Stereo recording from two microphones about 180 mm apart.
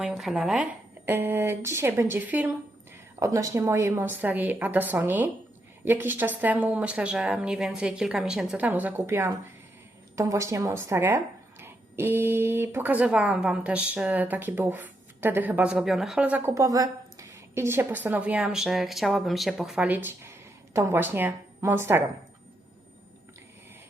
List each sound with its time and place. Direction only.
0.0 s speech: centre (ahead or behind)